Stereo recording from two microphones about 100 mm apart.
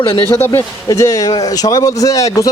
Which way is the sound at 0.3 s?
25° left (ahead or behind).